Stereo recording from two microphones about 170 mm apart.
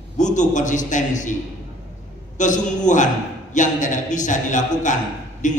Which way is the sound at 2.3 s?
45° left (ahead or behind).